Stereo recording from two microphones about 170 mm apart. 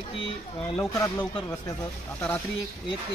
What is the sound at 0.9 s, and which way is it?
Speech, 20° left (ahead or behind).